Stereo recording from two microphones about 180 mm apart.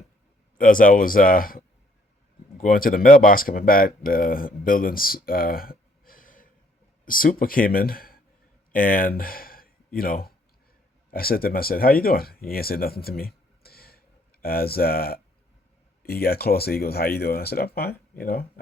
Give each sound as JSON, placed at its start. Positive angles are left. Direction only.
{"t": 0.6, "sound": "speech", "side_deg": 50}